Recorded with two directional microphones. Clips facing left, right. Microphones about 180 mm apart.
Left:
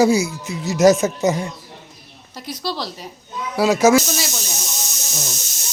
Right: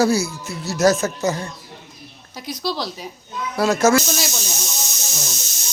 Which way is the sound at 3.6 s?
10° left (ahead or behind).